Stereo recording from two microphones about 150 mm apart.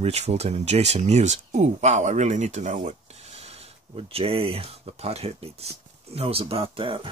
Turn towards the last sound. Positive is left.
turn(degrees=-35)  # may be behind; listen again after turning